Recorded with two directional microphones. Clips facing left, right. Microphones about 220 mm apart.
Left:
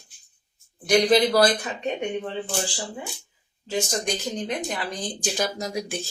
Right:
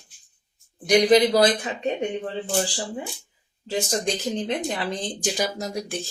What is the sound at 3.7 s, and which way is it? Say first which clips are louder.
A woman's voice: right 1 dB; 35° right (ahead or behind).